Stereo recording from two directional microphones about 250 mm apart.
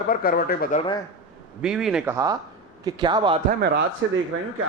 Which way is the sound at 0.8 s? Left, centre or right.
Centre.